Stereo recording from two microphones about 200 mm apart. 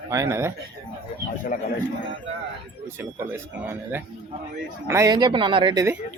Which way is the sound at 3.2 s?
10° right (ahead or behind).